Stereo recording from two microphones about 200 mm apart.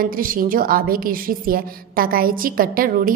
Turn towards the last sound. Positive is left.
turn(degrees=-45)  # may be behind; listen again after turning